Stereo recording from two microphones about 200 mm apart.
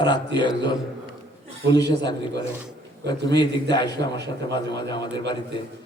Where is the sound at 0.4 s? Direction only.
20° left (ahead or behind).